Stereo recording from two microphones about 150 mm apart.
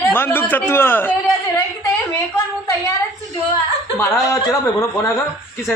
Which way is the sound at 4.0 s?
20° left (ahead or behind).